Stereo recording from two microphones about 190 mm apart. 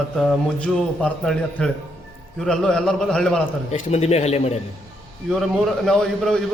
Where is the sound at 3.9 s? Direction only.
35° left (ahead or behind).